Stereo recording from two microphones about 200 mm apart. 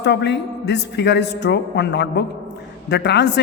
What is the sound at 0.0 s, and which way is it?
A man's voice, 60° left (ahead or behind).